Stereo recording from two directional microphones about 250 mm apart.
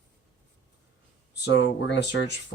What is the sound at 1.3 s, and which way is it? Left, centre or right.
Speech, left.